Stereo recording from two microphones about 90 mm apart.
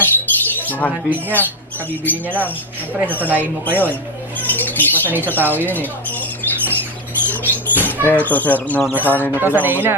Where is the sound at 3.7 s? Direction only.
20° left (ahead or behind).